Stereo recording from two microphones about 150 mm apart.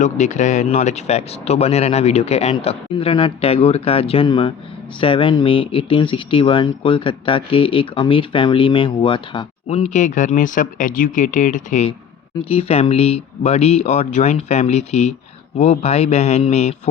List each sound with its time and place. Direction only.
0.0 s speech: 50° left (ahead or behind); by 9.5 s 30° left (ahead or behind)
9.6 s speech: 45° left (ahead or behind)
12.5 s speech: 40° left (ahead or behind)